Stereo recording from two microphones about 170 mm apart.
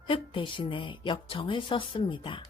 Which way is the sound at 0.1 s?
30° left (ahead or behind).